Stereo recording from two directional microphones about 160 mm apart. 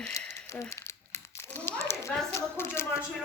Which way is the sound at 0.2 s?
15° left (ahead or behind).